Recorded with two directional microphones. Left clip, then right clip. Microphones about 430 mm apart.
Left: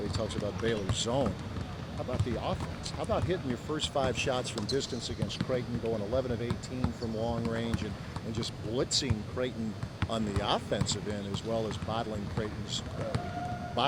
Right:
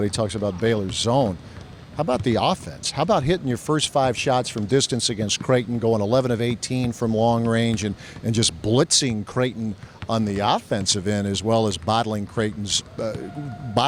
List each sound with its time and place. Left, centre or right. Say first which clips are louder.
0.1 s speech: right 10 dB; right
2.0 s speech: right 14 dB; right